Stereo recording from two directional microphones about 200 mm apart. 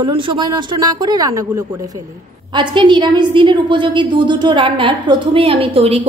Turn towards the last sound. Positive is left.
turn(degrees=-30)  # may be behind; listen again after turning